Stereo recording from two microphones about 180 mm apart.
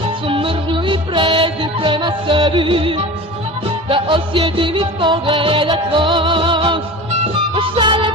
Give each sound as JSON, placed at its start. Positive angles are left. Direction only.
{"t": 0.3, "sound": "music", "side_deg": -30}